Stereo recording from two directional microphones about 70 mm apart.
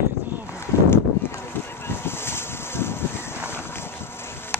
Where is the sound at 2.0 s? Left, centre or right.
Left.